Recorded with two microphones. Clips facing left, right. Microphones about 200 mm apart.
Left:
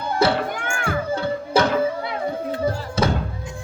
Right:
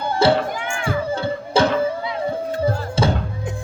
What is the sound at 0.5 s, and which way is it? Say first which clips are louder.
Music: right 1 dB; 55° left (ahead or behind).